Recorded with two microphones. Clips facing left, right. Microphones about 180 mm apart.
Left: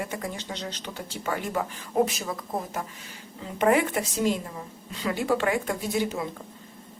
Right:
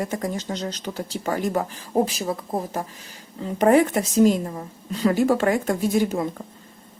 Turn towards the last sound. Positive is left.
turn(degrees=-45)  # may be behind; listen again after turning